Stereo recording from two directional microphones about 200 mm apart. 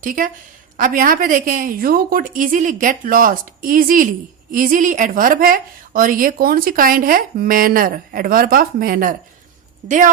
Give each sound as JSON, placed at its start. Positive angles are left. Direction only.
{"t": 0.0, "sound": "a woman's voice", "side_deg": -40}